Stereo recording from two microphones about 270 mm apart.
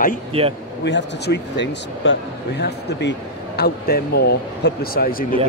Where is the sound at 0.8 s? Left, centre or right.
Left.